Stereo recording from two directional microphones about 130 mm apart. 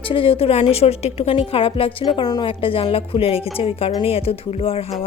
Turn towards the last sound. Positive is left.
turn(degrees=45)  # may be behind; listen again after turning